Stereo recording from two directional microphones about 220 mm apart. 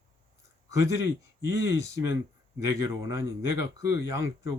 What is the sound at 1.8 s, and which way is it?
Speech, 15° right (ahead or behind).